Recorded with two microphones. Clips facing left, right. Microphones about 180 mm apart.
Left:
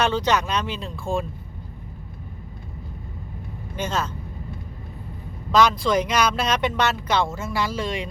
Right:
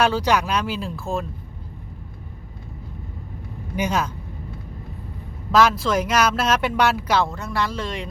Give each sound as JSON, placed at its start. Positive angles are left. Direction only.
{"t": 0.0, "sound": "speech", "side_deg": -10}
{"t": 3.8, "sound": "speech", "side_deg": -10}
{"t": 5.5, "sound": "speech", "side_deg": -5}